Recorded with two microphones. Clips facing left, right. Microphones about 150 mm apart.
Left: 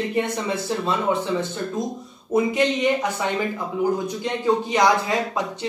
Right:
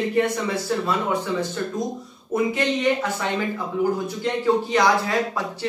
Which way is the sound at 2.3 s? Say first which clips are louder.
Left 2 dB; 15° left (ahead or behind).